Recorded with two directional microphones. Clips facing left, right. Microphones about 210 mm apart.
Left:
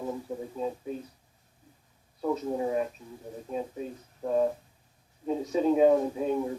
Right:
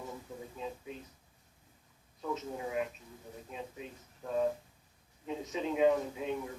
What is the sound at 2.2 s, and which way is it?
A man's voice, 35° left (ahead or behind).